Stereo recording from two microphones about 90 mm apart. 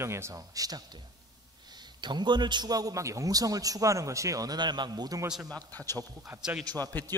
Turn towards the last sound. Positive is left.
turn(degrees=20)  # may be behind; listen again after turning